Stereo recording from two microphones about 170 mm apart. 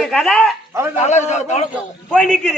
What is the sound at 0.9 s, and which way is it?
Speech, 40° left (ahead or behind).